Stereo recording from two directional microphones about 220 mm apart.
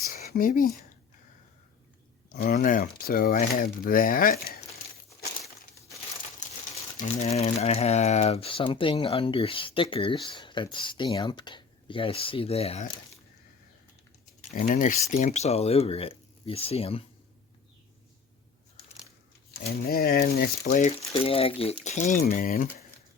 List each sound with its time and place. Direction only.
0.0 s a sound: 40° left (ahead or behind)
2.3 s speech: 40° left (ahead or behind)
7.0 s speech: 30° left (ahead or behind)
14.7 s speech: 35° left (ahead or behind)
19.9 s speech: 45° left (ahead or behind)